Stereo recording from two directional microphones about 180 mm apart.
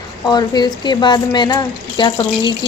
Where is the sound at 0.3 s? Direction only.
25° left (ahead or behind).